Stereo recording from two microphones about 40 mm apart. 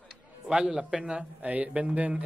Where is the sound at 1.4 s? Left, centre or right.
Right.